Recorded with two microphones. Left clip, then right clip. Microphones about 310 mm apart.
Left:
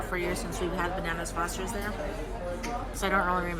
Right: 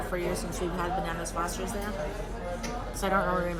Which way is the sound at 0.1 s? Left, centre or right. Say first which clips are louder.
Left 1 dB; centre.